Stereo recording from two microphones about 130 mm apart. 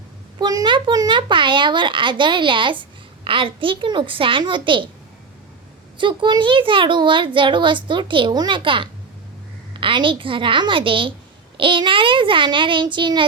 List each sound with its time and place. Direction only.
0.3 s a child's voice: 35° right (ahead or behind)
6.0 s a child's voice: 40° right (ahead or behind)